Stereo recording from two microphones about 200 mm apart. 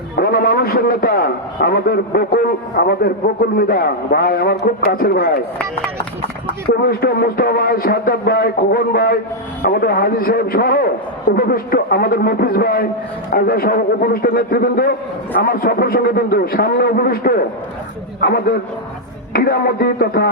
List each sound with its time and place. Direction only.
0.2 s a man's voice: 45° left (ahead or behind)
6.8 s a man's voice: 50° left (ahead or behind)